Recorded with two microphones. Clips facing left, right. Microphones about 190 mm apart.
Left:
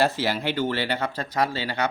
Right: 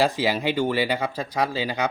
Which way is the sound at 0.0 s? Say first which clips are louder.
Right 2 dB; 15° right (ahead or behind).